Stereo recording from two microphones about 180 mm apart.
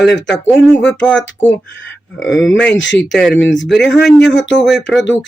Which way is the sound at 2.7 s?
90° left.